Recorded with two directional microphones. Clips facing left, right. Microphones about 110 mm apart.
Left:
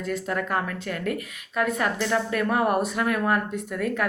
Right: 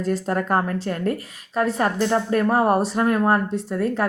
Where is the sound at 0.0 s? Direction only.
35° right (ahead or behind).